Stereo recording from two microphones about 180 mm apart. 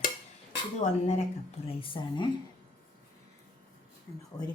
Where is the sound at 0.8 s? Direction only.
40° left (ahead or behind).